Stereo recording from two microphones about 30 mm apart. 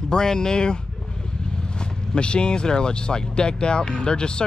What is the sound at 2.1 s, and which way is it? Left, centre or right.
Speech, left.